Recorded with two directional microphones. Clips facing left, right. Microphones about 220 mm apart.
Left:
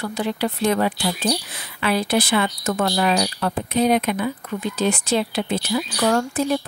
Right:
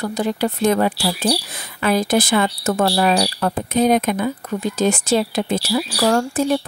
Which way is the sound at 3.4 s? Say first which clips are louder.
Right 2 dB; 45° right (ahead or behind).